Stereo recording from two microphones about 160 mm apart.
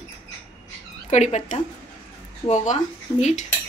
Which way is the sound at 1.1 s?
45° left (ahead or behind).